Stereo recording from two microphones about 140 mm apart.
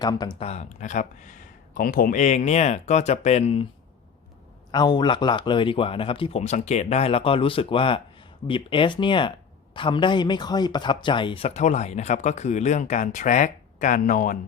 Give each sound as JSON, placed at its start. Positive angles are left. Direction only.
{"t": 0.0, "sound": "speech", "side_deg": 30}
{"t": 0.3, "sound": "speech", "side_deg": 50}
{"t": 4.7, "sound": "a man's voice", "side_deg": 30}
{"t": 6.4, "sound": "a man's voice", "side_deg": 55}